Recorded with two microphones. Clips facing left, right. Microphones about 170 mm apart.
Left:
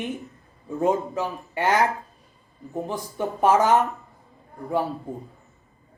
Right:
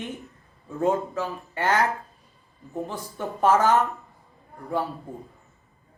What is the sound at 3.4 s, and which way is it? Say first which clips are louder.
Speech: left 1 dB; 15° left (ahead or behind).